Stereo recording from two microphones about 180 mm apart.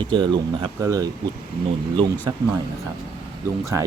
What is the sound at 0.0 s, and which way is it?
Speech, 25° right (ahead or behind).